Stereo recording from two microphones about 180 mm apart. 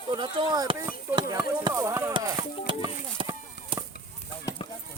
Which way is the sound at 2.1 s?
25° right (ahead or behind).